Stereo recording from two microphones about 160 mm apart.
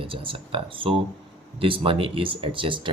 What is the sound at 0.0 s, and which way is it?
Speech, 35° right (ahead or behind).